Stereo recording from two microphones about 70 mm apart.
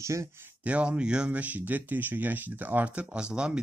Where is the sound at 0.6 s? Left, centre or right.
Centre.